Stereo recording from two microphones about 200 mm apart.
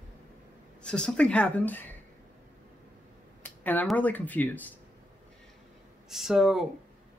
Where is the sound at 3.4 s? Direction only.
10° left (ahead or behind).